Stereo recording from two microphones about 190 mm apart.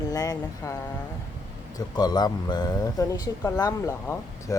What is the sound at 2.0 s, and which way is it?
Speech, 20° left (ahead or behind).